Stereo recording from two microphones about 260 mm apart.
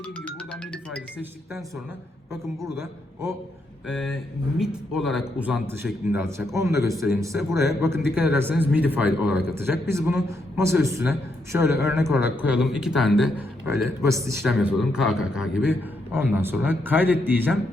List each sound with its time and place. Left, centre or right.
0.0 s music: centre
2.3 s a man's voice: centre